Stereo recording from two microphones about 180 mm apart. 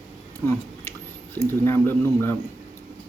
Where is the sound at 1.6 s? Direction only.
15° left (ahead or behind).